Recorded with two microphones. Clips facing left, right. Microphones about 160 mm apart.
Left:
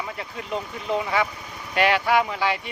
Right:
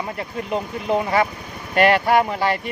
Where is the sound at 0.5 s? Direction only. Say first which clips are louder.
Right 4 dB; 50° right (ahead or behind).